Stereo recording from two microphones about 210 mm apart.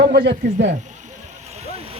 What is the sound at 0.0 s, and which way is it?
Speech, 50° right (ahead or behind).